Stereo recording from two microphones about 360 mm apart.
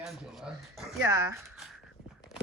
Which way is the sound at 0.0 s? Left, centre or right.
Centre.